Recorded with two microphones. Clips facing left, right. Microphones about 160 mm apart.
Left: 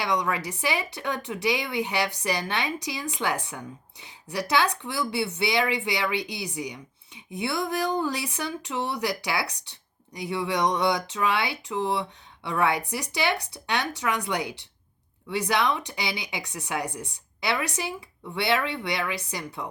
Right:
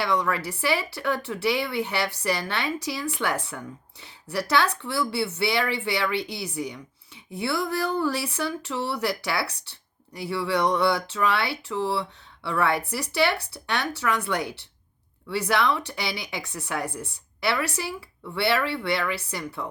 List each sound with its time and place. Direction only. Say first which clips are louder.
0.0 s speech: right 2 dB; 15° left (ahead or behind)